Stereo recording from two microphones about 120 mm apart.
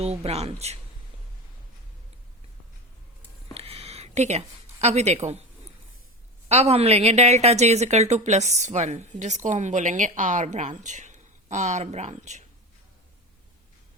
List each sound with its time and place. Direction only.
0.0 s speech: 60° right (ahead or behind)
3.5 s a sound: 55° right (ahead or behind)
6.5 s a woman's voice: 60° right (ahead or behind); by 12.5 s 75° right (ahead or behind)